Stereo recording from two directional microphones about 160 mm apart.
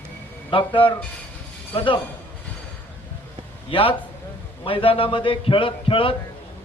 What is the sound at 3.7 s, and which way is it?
A man's voice, 35° left (ahead or behind).